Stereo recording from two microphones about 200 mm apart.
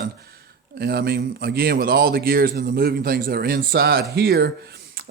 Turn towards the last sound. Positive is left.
turn(degrees=-50)  # may be behind; listen again after turning